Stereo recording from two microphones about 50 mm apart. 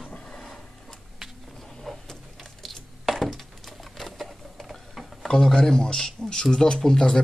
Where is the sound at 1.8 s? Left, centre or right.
Centre.